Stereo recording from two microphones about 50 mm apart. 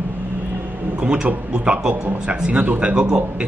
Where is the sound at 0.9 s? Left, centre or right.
Centre.